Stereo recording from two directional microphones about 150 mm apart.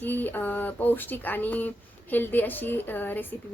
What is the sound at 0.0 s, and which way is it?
Speech, 10° left (ahead or behind).